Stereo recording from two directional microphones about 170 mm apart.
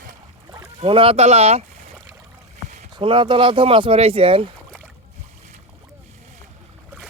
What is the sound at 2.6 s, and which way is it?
Rowboat, 45° right (ahead or behind).